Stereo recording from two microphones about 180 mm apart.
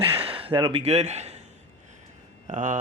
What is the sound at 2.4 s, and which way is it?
Speech, 45° right (ahead or behind).